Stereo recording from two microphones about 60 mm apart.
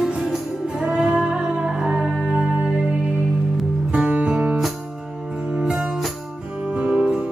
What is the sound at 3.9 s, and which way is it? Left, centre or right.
Music, right.